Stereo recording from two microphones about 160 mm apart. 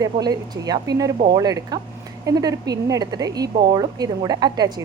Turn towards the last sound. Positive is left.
turn(degrees=-25)  # may be behind; listen again after turning